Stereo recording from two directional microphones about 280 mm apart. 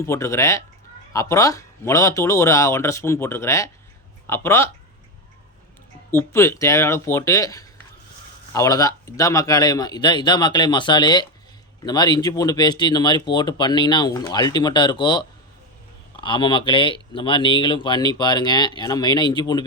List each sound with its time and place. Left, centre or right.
0.0 s speech: centre
6.1 s speech: centre